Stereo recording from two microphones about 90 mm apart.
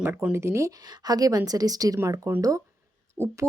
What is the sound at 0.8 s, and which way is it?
A woman's voice, 45° right (ahead or behind).